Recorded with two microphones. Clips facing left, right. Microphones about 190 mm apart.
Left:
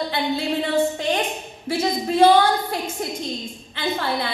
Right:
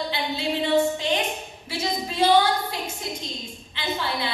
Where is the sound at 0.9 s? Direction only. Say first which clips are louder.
Left 2 dB; 50° left (ahead or behind).